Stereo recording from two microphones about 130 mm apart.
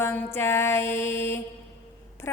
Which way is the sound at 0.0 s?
20° left (ahead or behind).